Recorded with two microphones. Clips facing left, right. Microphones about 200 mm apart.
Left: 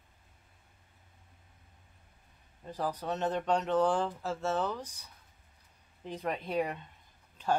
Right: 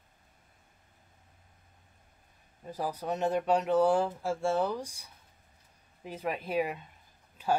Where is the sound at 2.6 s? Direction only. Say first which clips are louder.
Even; 10° right (ahead or behind).